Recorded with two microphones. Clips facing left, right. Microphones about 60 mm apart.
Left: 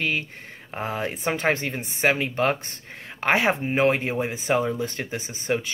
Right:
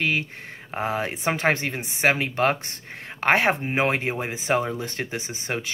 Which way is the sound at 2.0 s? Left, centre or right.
Right.